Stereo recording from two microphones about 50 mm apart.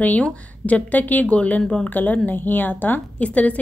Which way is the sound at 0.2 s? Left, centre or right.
Left.